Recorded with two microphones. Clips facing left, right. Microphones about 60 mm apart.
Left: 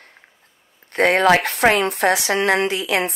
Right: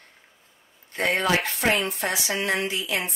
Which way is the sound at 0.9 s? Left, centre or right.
Left.